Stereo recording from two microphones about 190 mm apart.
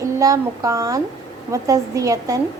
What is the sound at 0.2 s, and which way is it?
A woman's voice, 20° right (ahead or behind).